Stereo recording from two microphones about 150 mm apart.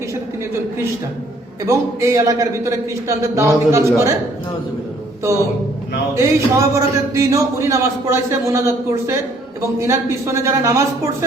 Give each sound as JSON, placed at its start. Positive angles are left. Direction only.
{"t": 1.6, "sound": "a man's voice", "side_deg": -20}
{"t": 5.3, "sound": "a man's voice", "side_deg": -20}